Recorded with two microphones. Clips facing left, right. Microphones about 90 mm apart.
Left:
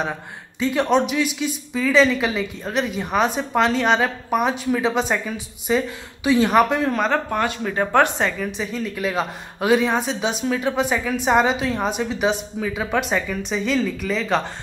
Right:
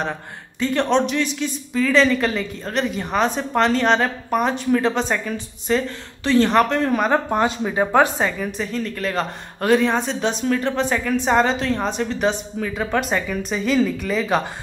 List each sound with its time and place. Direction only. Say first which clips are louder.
0.0 s speech: even; 5° left (ahead or behind)
6.9 s speech: right 2 dB; 5° right (ahead or behind)
7.2 s speech: right 3 dB; 20° right (ahead or behind)
7.7 s speech: even; 10° right (ahead or behind)